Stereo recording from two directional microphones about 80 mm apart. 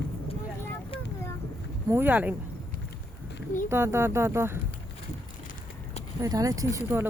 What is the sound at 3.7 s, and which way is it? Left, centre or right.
Speech, right.